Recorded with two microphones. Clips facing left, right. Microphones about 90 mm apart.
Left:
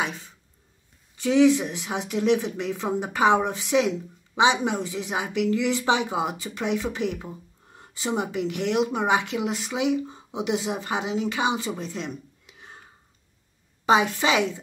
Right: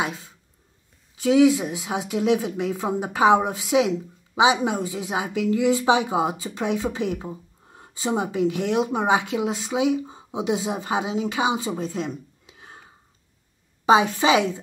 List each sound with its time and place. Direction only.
1.2 s speech: 10° right (ahead or behind)
12.1 s a sound: 15° right (ahead or behind)
13.8 s speech: 20° right (ahead or behind)